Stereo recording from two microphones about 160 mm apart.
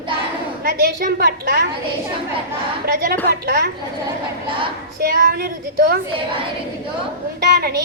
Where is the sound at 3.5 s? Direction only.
70° right (ahead or behind).